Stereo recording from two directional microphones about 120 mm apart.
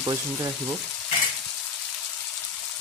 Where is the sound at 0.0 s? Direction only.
30° right (ahead or behind).